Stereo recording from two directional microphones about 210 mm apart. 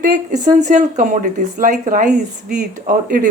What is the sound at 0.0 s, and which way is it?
A woman's voice, 35° right (ahead or behind).